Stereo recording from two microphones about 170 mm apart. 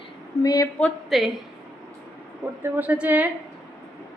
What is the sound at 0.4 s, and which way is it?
Speech, 25° left (ahead or behind).